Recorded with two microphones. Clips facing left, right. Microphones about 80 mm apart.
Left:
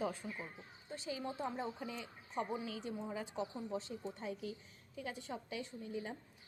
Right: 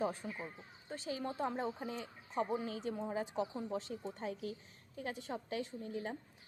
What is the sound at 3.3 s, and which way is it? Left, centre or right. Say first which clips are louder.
Speech: right 3 dB; right.